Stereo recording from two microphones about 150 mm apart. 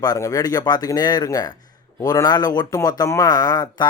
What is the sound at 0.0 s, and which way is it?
Speech, 25° left (ahead or behind).